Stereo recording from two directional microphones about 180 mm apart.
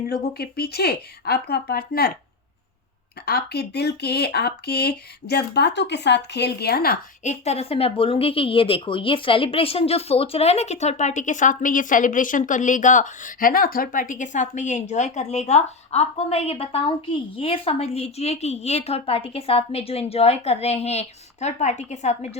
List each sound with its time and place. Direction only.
0.1 s speech: 60° left (ahead or behind)
3.2 s speech: 65° left (ahead or behind)
7.3 s speech: 35° left (ahead or behind)